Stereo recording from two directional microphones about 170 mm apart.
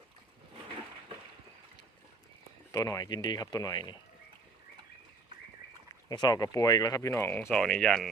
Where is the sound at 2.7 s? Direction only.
20° left (ahead or behind).